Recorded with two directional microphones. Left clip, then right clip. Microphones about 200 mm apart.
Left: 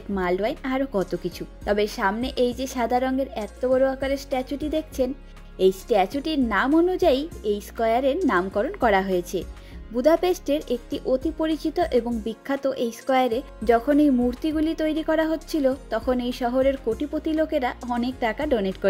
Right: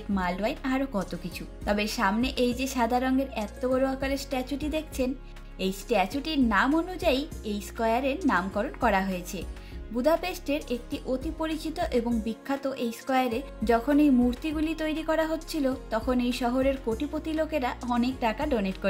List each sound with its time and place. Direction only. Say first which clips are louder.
0.1 s a woman's voice: left 5 dB; 35° left (ahead or behind)